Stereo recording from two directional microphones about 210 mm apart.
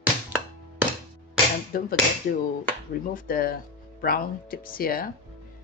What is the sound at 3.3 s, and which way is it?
A woman's voice, 45° left (ahead or behind).